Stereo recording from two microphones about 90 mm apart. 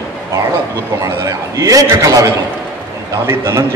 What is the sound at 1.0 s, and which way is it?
A man's voice, 35° right (ahead or behind).